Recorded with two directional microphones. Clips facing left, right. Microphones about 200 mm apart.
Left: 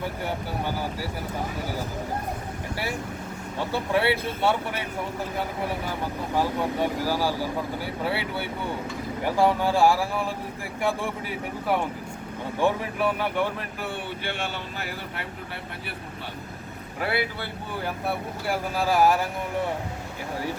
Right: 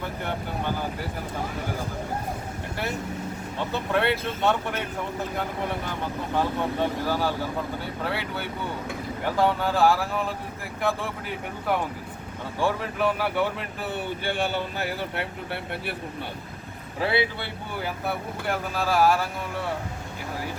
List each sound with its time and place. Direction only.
3.6 s speech: 10° left (ahead or behind)
12.5 s speech: 15° left (ahead or behind)
13.0 s speech: 5° right (ahead or behind)
14.8 s speech: 60° right (ahead or behind)
17.0 s speech: 25° right (ahead or behind)
18.0 s speech: 5° left (ahead or behind)